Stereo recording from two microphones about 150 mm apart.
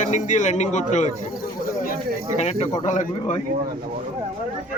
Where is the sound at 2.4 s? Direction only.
50° left (ahead or behind).